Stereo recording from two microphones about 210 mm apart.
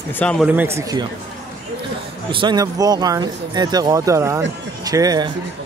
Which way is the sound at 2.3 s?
20° right (ahead or behind).